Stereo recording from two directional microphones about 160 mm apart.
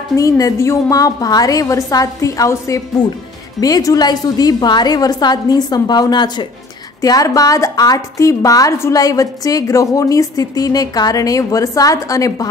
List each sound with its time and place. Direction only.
0.1 s a woman's voice: 20° left (ahead or behind)